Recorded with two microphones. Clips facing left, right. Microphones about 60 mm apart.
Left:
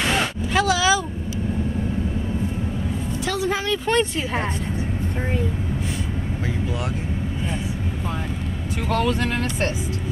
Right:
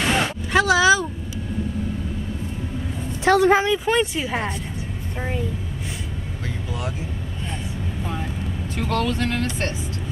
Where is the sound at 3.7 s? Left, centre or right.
Centre.